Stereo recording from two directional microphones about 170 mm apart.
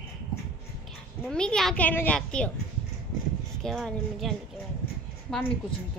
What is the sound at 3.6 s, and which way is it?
A child's voice, centre (ahead or behind).